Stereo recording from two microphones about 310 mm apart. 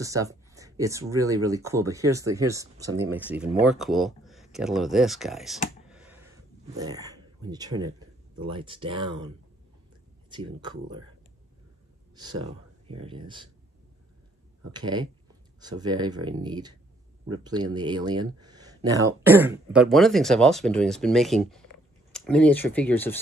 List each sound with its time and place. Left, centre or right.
0.0 s speech: centre
5.9 s clicking: centre
6.8 s speech: centre
10.3 s speech: centre
12.2 s speech: centre
14.7 s speech: centre